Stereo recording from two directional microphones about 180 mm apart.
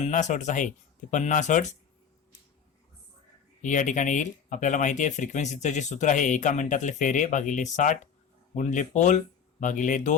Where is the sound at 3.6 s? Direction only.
45° left (ahead or behind).